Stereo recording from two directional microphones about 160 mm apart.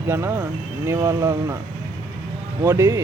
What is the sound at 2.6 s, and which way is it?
Speech, 15° right (ahead or behind).